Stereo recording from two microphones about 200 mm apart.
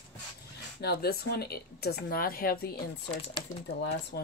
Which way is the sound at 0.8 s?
55° left (ahead or behind).